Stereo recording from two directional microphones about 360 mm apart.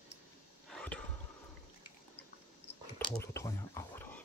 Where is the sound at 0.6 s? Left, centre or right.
Centre.